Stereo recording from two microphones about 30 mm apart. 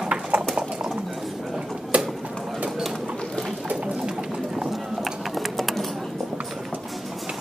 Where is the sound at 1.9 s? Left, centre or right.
Right.